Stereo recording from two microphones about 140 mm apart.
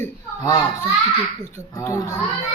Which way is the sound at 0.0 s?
25° left (ahead or behind).